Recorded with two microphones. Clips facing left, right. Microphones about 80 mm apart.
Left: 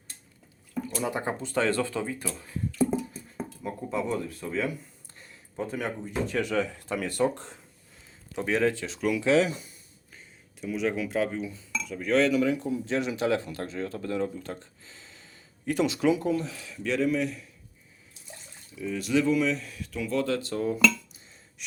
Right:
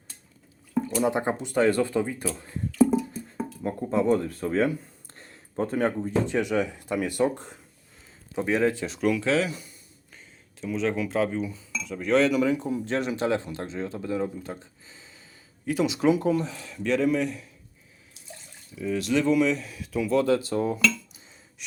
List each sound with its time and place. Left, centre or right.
1.0 s speech: right
3.6 s speech: right
5.1 s a sound: right
5.7 s speech: right
6.2 s speech: centre
9.2 s speech: left
10.6 s speech: centre
13.2 s speech: right; by 17.5 s centre
18.8 s speech: centre